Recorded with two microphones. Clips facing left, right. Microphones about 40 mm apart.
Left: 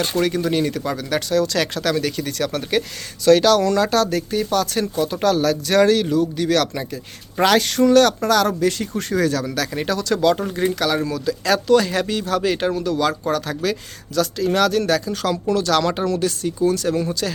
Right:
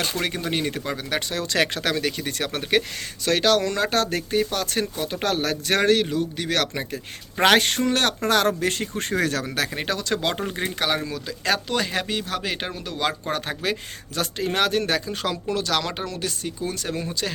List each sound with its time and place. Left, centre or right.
0.2 s speech: right
3.2 s speech: centre; by 7.8 s right
7.8 s speech: right